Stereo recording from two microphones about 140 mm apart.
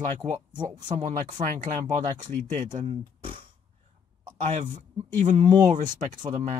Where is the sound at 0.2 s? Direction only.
65° right (ahead or behind).